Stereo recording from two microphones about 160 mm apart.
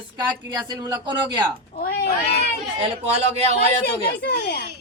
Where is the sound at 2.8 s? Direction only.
45° right (ahead or behind).